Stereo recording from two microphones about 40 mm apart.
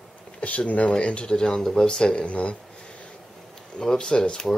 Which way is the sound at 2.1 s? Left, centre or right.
Left.